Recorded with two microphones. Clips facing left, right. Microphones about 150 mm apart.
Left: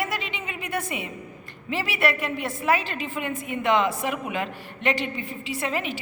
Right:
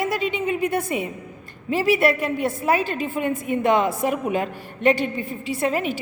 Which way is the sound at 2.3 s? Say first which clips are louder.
Right 3 dB; 45° right (ahead or behind).